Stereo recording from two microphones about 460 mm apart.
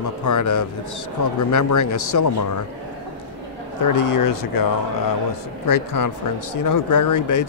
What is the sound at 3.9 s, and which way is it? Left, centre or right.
Speech, left.